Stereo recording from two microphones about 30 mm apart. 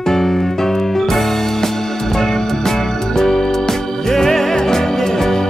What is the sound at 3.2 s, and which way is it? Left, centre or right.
Music, centre.